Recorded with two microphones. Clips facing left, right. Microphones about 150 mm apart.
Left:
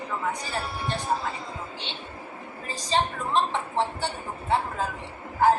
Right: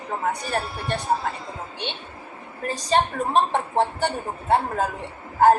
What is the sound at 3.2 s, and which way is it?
A woman's voice, 55° right (ahead or behind).